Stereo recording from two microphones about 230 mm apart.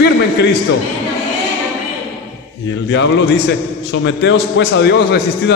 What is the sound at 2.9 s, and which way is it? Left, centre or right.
A man's voice, left.